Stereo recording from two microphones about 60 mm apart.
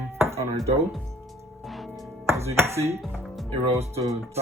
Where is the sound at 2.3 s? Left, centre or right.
Right.